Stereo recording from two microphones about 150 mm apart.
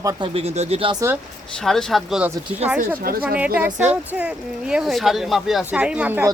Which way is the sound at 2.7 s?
80° right.